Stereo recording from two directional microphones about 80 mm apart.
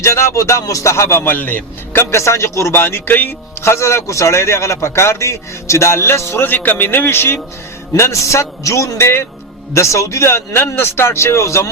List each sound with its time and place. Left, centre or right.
0.0 s speech: left